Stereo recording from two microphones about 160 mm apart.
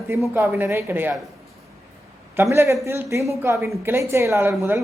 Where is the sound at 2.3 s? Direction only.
15° right (ahead or behind).